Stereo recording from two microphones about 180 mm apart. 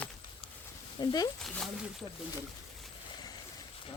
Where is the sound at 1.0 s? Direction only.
20° left (ahead or behind).